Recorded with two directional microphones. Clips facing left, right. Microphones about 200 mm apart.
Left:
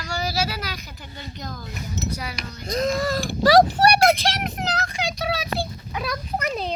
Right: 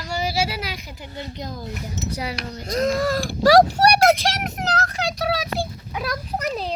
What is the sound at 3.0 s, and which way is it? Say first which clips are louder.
Speech: right 2 dB; 10° right (ahead or behind).